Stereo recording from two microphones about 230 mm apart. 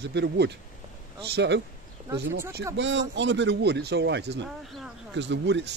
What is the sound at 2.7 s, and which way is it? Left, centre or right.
Speech, right.